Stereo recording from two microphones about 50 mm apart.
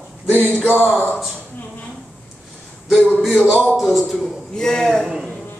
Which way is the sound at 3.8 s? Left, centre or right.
Centre.